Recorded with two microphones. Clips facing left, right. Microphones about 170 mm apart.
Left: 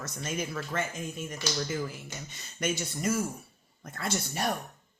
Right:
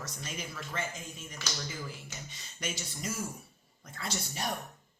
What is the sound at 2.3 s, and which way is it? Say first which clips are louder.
Speech: left 9 dB; 55° left (ahead or behind).